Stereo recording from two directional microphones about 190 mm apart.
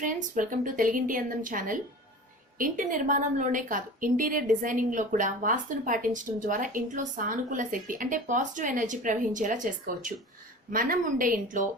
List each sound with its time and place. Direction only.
0.0 s a woman's voice: 45° right (ahead or behind)